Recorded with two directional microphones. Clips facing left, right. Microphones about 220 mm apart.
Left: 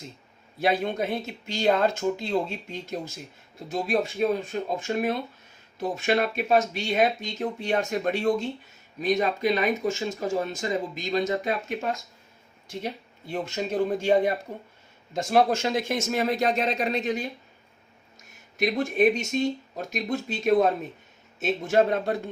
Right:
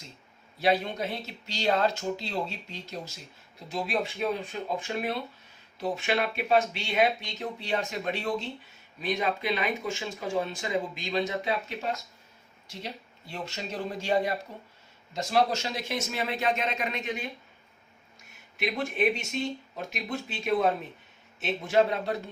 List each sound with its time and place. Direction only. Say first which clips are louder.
0.6 s speech: left 2 dB; 50° left (ahead or behind)